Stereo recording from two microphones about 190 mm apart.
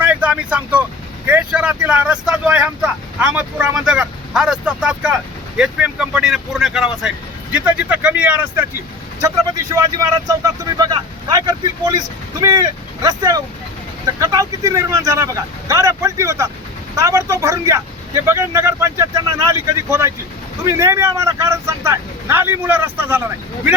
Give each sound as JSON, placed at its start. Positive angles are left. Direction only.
{"t": 0.0, "sound": "vehicle", "side_deg": -5}
{"t": 1.3, "sound": "speech", "side_deg": -5}
{"t": 9.8, "sound": "speech", "side_deg": -20}